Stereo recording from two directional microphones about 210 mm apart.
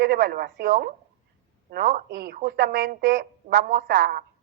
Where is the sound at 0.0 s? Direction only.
50° right (ahead or behind).